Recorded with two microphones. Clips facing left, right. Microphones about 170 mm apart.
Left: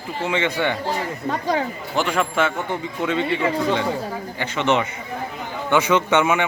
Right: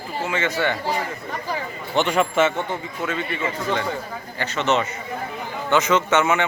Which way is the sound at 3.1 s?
20° left (ahead or behind).